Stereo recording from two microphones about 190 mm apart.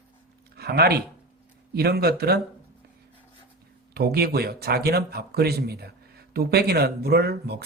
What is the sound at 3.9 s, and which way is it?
Speech, 55° right (ahead or behind).